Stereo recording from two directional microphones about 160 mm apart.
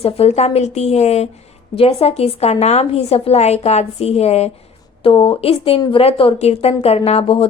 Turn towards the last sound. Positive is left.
turn(degrees=40)  # may be behind; listen again after turning